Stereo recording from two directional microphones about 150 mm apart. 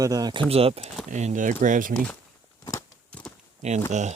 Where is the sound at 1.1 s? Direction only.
50° right (ahead or behind).